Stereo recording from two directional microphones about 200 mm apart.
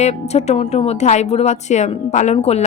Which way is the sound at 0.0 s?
35° left (ahead or behind).